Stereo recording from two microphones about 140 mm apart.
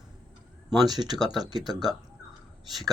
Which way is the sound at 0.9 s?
30° right (ahead or behind).